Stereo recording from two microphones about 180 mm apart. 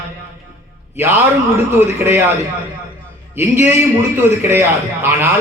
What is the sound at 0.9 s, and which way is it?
A man's voice, 10° right (ahead or behind).